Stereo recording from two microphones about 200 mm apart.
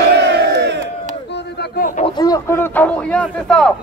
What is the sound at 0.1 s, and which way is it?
Crowd, 60° right (ahead or behind).